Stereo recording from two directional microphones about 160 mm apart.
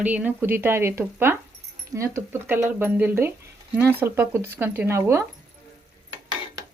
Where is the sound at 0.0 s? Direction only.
10° right (ahead or behind).